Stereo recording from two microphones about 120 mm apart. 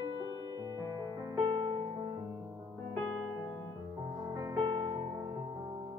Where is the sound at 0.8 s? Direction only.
30° right (ahead or behind).